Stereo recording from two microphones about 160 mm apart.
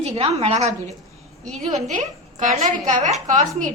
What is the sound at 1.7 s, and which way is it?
A woman's voice, 45° right (ahead or behind).